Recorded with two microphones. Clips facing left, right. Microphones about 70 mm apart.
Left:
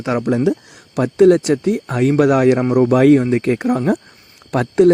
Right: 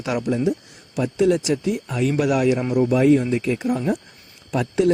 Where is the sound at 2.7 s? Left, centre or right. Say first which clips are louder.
Left 4 dB; left.